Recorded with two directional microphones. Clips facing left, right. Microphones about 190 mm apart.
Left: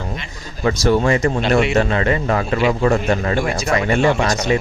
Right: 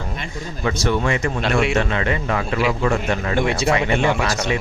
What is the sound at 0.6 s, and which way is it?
Speech, 40° left (ahead or behind).